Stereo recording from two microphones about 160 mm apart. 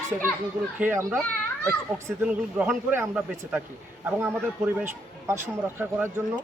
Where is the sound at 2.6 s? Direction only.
15° right (ahead or behind).